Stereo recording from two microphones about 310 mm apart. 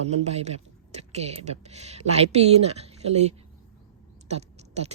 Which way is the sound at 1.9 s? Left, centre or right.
Right.